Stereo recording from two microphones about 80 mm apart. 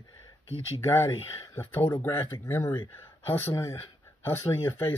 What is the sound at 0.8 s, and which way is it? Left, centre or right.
Speech, left.